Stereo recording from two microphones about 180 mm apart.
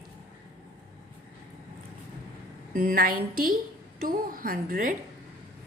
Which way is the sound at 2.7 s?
55° right (ahead or behind).